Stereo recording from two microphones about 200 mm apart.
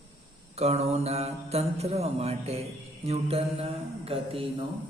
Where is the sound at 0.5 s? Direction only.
30° right (ahead or behind).